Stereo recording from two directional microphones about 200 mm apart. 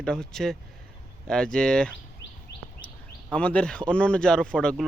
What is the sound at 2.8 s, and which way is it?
Speech, 5° left (ahead or behind).